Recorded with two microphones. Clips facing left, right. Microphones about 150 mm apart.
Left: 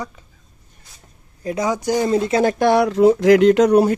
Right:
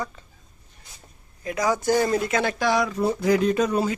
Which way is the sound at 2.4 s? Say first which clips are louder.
Left 7 dB; 55° left (ahead or behind).